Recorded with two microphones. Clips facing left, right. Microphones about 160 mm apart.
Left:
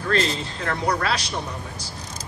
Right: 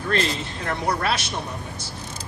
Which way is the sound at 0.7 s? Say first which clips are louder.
Even; 25° right (ahead or behind).